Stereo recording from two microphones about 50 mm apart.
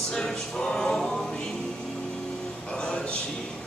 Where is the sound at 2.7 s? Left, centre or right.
Left.